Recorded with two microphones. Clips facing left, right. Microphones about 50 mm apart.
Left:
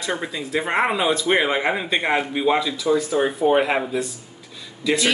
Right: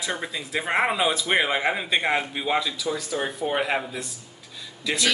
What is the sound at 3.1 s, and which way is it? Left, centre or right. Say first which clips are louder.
Speech: left 6 dB; centre.